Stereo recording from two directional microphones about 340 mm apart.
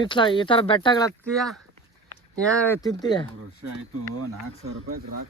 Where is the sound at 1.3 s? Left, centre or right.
Centre.